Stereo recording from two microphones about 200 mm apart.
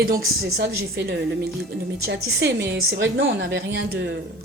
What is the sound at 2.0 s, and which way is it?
A woman's voice, 60° right (ahead or behind).